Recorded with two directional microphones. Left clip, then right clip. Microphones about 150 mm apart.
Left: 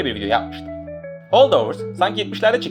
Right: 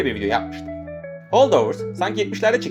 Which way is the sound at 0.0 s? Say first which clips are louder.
Left 1 dB; 30° right (ahead or behind).